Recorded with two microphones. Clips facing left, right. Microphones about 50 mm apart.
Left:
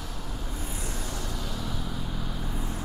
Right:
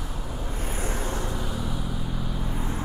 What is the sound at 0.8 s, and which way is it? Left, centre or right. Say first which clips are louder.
Vehicle: right 8 dB; right.